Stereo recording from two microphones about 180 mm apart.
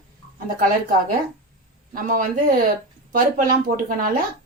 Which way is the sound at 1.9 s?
50° right (ahead or behind).